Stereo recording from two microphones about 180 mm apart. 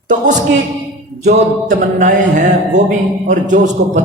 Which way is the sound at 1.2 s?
40° right (ahead or behind).